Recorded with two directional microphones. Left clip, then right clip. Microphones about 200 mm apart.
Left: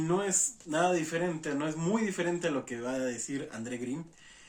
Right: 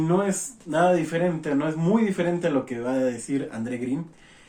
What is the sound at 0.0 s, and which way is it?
Speech, 20° left (ahead or behind).